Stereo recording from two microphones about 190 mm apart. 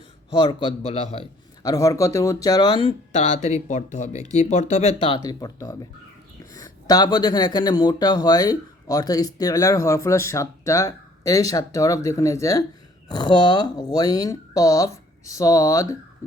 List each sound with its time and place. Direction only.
0.3 s speech: 25° left (ahead or behind)
1.6 s speech: 20° left (ahead or behind)